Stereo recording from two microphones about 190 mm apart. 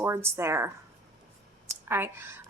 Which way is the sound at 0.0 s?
15° right (ahead or behind).